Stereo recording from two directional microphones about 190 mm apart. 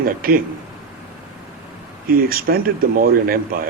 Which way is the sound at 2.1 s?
50° right (ahead or behind).